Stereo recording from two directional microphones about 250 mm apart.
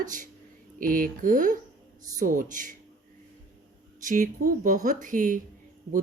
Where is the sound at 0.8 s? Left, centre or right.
Right.